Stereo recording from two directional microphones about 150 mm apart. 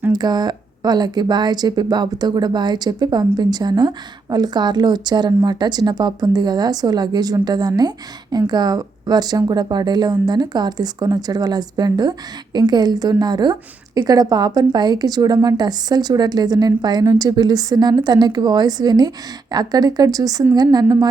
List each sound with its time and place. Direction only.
0.1 s speech: 25° right (ahead or behind)